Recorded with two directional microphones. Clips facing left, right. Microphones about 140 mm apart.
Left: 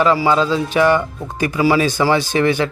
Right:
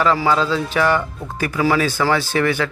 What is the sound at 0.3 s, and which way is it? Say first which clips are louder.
Speech: left 2 dB; 15° left (ahead or behind).